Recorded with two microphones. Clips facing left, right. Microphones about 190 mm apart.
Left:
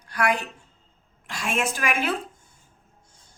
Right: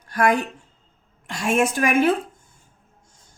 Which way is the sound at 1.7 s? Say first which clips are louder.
Right 8 dB; 50° right (ahead or behind).